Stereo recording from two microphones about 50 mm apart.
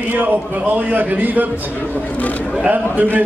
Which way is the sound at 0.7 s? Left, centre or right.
Right.